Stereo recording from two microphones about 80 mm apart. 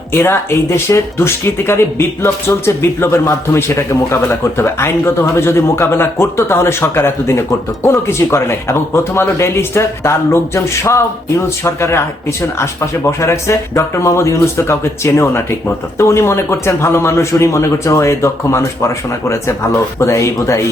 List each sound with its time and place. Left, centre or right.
0.1 s speech: left
20.0 s speech: left